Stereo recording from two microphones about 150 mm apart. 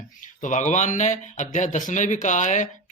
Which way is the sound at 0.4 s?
55° left (ahead or behind).